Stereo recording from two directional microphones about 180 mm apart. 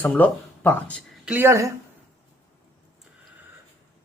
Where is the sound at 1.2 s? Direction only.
10° right (ahead or behind).